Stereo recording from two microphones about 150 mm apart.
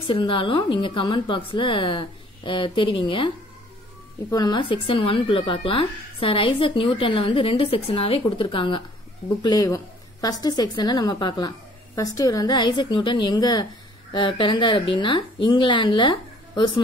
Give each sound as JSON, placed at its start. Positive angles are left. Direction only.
{"t": 0.0, "sound": "a woman's voice", "side_deg": 35}